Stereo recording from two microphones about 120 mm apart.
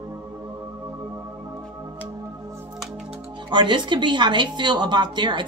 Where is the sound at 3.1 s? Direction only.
40° right (ahead or behind).